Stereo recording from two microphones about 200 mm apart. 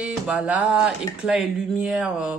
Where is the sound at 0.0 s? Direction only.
5° right (ahead or behind).